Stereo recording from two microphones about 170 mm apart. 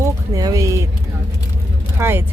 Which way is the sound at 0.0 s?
20° right (ahead or behind).